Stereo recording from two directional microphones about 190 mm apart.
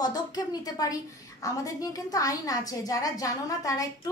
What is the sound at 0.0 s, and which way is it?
A woman's voice, 20° left (ahead or behind).